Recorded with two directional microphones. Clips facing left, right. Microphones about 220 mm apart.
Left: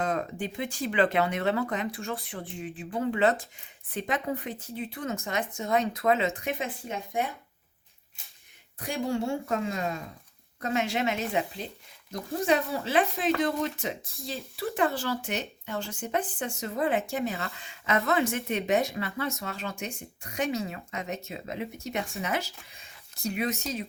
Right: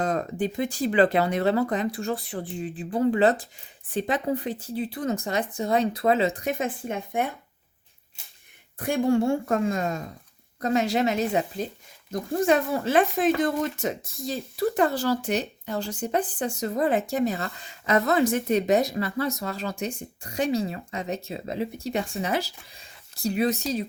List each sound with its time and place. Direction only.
0.0 s speech: 40° right (ahead or behind); by 7.3 s 55° right (ahead or behind)
8.8 s speech: 55° right (ahead or behind); by 23.8 s 35° right (ahead or behind)